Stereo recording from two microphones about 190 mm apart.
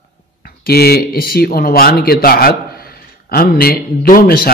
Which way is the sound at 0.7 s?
55° left (ahead or behind).